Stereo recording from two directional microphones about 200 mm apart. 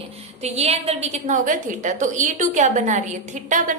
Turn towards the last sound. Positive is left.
turn(degrees=-40)  # may be behind; listen again after turning